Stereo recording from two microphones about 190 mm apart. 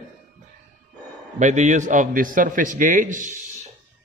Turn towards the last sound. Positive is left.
turn(degrees=-45)  # may be behind; listen again after turning